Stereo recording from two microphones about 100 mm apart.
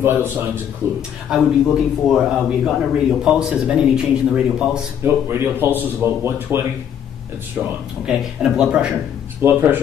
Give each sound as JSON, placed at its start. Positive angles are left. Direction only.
{"t": 0.0, "sound": "a man's voice", "side_deg": -25}
{"t": 1.3, "sound": "a man's voice", "side_deg": -5}
{"t": 5.0, "sound": "a man's voice", "side_deg": -20}
{"t": 8.0, "sound": "a man's voice", "side_deg": -5}
{"t": 9.4, "sound": "a man's voice", "side_deg": -20}